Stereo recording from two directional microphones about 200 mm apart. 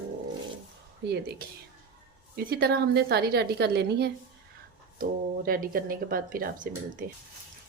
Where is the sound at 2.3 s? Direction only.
50° right (ahead or behind).